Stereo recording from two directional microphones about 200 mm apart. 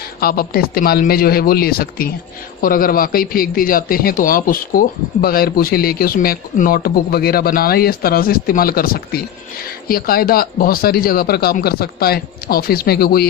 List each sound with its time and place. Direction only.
0.2 s a man's voice: 50° left (ahead or behind)